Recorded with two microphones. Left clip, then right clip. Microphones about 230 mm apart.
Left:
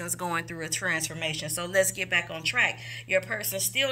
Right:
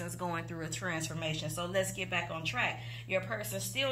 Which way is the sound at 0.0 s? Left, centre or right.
Left.